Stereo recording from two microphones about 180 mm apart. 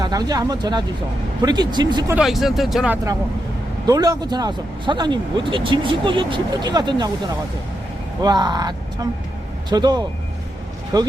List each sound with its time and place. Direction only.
0.0 s speech: 20° right (ahead or behind)
2.1 s speech: centre (ahead or behind)
3.8 s speech: 20° right (ahead or behind)
8.2 s speech: 25° right (ahead or behind)